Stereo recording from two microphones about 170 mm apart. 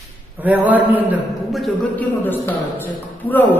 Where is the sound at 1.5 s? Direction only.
5° left (ahead or behind).